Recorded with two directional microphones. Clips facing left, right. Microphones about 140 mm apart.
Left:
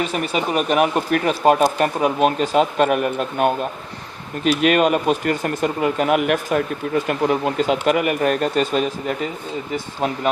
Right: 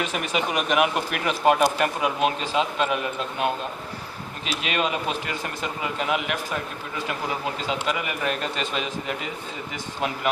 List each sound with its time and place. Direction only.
0.0 s speech: 40° left (ahead or behind)